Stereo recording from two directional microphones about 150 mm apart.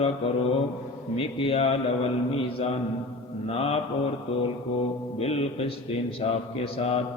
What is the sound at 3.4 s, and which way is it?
Mantra, 40° left (ahead or behind).